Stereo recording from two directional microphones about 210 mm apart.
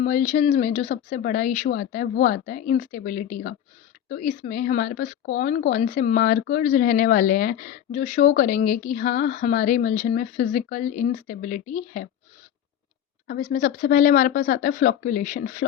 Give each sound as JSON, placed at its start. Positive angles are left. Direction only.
{"t": 0.0, "sound": "speech", "side_deg": 40}
{"t": 13.2, "sound": "speech", "side_deg": 40}